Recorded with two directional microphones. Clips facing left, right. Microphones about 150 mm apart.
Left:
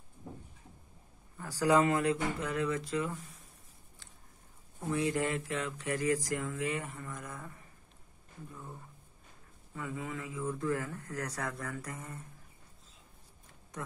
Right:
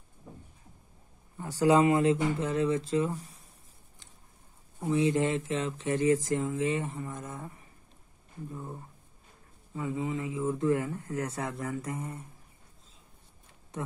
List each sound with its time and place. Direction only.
1.4 s speech: 25° right (ahead or behind)
4.7 s speech: 20° right (ahead or behind)
9.8 s speech: 20° right (ahead or behind)